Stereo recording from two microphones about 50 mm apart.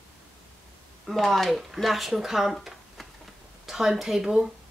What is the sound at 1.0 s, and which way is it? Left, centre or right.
Speech, centre.